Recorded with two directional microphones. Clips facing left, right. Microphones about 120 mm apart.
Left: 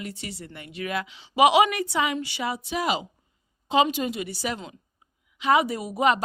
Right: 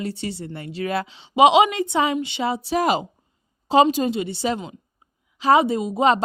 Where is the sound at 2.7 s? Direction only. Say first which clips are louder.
Right 7 dB; 45° right (ahead or behind).